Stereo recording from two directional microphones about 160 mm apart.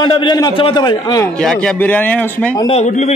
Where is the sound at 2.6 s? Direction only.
45° left (ahead or behind).